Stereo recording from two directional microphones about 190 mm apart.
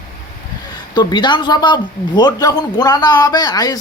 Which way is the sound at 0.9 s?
25° left (ahead or behind).